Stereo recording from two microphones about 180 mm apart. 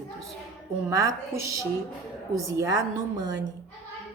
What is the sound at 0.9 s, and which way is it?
A woman's voice, 20° right (ahead or behind).